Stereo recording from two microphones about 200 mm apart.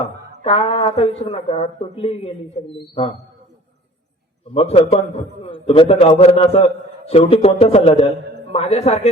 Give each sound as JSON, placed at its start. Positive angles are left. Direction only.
{"t": 0.4, "sound": "speech", "side_deg": 30}
{"t": 4.5, "sound": "a man's voice", "side_deg": 30}